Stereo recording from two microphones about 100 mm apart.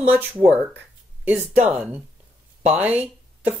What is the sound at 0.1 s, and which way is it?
Speech, 20° right (ahead or behind).